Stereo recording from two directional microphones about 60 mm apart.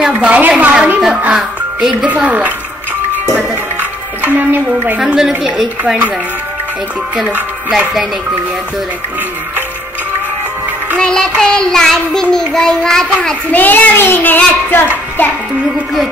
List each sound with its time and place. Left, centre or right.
0.0 s a woman's voice: centre
0.3 s a woman's voice: right
1.3 s speech: centre
2.0 s a woman's voice: right
4.2 s speech: right
4.9 s a woman's voice: centre
11.0 s child singing: centre
13.5 s child singing: left